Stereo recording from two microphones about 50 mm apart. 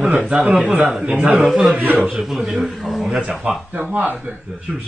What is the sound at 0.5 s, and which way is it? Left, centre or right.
Speech, right.